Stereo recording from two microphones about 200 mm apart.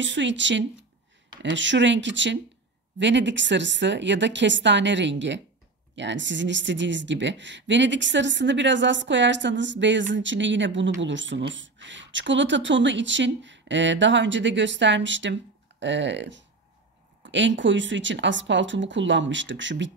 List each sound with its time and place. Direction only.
0.0 s speech: 65° right (ahead or behind)